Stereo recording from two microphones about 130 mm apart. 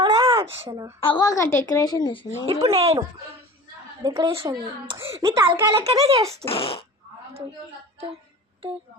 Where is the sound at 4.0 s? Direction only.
30° right (ahead or behind).